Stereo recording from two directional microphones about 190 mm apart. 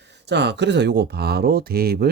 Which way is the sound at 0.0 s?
65° right (ahead or behind).